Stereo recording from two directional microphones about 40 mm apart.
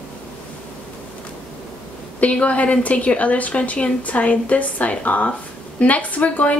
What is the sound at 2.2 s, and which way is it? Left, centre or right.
A woman's voice, left.